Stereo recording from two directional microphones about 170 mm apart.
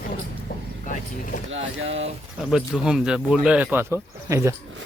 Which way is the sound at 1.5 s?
35° right (ahead or behind).